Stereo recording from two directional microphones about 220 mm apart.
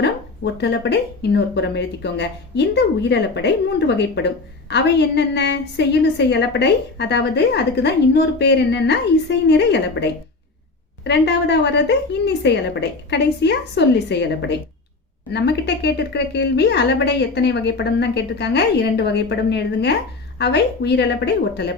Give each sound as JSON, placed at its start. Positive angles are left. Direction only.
{"t": 0.6, "sound": "a woman's voice", "side_deg": 50}